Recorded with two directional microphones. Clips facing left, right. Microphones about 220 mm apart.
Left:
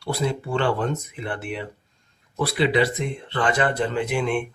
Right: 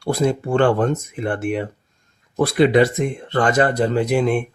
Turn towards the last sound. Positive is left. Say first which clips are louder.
# right 6 dB
turn(degrees=-40)  # may be behind; listen again after turning